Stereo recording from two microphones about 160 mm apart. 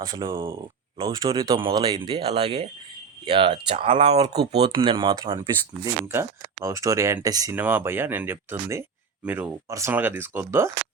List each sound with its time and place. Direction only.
0.0 s speech: 25° right (ahead or behind)
7.5 s speech: 10° right (ahead or behind)